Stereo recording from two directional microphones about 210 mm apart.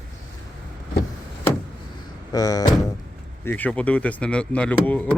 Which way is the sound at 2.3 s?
15° left (ahead or behind).